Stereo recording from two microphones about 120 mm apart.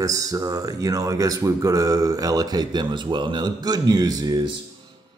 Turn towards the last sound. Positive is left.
turn(degrees=-30)  # may be behind; listen again after turning